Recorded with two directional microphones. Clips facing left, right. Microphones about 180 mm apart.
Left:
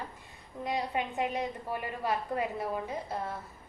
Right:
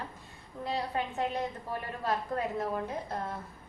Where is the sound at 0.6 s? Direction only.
15° left (ahead or behind).